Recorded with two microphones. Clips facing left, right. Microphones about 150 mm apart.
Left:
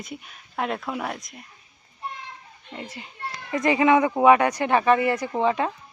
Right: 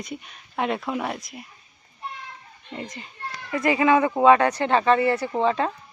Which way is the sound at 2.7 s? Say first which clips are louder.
Right 2 dB; 5° left (ahead or behind).